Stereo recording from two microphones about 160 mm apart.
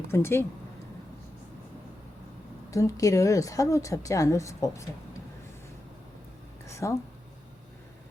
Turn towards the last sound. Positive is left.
turn(degrees=20)  # may be behind; listen again after turning